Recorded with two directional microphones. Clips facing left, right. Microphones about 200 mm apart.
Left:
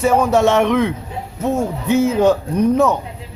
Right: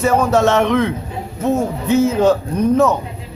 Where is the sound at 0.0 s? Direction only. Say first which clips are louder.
Even; 10° left (ahead or behind).